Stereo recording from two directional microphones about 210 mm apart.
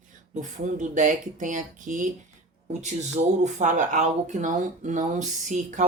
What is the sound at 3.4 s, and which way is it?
Speech, 35° right (ahead or behind).